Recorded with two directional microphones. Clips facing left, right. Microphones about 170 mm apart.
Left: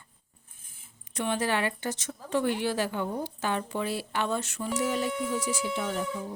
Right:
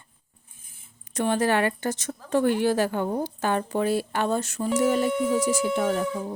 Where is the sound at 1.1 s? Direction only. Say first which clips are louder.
Right 6 dB; 45° right (ahead or behind).